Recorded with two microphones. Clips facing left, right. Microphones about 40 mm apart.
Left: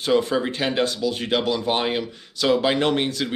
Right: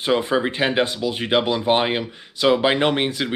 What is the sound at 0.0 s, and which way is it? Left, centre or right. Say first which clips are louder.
Speech: right 1 dB; right.